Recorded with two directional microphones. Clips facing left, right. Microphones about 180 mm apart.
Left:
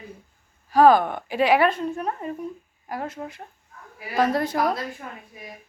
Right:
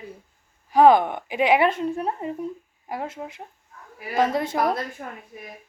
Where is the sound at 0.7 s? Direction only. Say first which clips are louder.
Right 1 dB; 20° right (ahead or behind).